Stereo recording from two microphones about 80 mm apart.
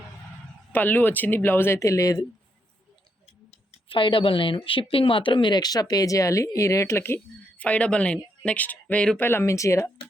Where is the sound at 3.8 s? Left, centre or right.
Left.